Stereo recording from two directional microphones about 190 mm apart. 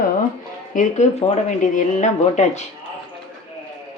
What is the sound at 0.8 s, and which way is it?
Speech, 40° left (ahead or behind).